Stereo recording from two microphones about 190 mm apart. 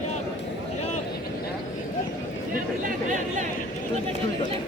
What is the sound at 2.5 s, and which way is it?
Chatter, 45° right (ahead or behind).